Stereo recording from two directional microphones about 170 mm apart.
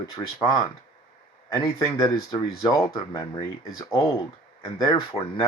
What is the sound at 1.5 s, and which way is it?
Speech, 20° left (ahead or behind).